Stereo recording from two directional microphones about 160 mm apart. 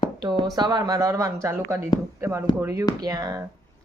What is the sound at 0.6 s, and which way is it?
Speech, 25° right (ahead or behind).